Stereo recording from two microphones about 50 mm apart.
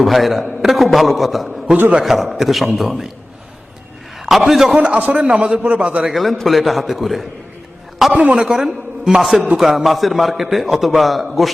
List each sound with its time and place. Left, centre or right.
0.0 s a man's voice: centre
4.3 s a man's voice: centre
4.8 s a man's voice: right
6.4 s a man's voice: centre
8.3 s a man's voice: centre